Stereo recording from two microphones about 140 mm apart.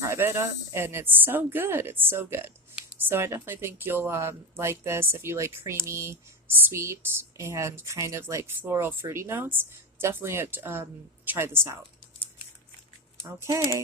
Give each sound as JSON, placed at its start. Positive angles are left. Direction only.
{"t": 0.0, "sound": "speech", "side_deg": -20}
{"t": 13.2, "sound": "speech", "side_deg": -25}